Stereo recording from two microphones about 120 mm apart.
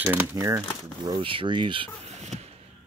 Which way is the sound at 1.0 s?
40° right (ahead or behind).